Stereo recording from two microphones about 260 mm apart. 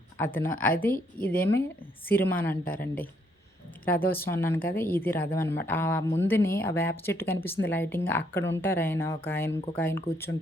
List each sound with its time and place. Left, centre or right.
0.3 s a woman's voice: centre